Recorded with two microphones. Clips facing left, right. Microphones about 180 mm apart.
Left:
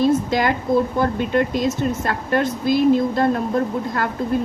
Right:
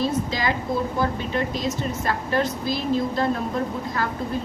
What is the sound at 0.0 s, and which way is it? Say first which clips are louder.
A woman's voice: left 6 dB; 55° left (ahead or behind).